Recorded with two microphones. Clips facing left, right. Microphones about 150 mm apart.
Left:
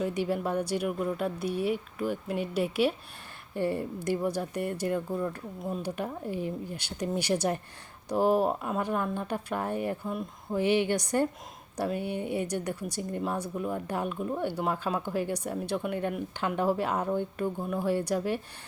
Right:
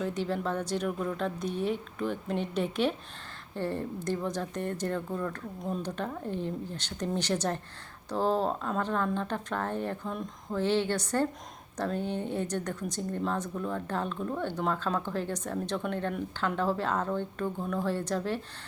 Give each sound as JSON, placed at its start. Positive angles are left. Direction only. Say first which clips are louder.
{"t": 0.0, "sound": "speech", "louder": "left 2 dB", "side_deg": 10}